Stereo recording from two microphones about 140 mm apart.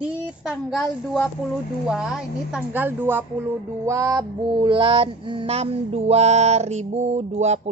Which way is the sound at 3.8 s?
25° right (ahead or behind).